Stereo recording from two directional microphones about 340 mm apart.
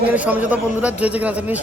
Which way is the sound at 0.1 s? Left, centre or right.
Centre.